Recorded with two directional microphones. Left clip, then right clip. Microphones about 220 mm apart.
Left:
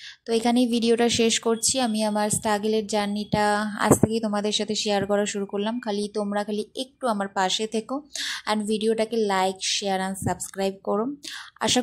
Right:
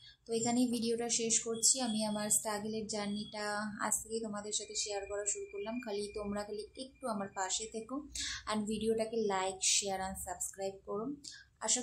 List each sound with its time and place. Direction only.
0.3 s a woman's voice: 35° left (ahead or behind)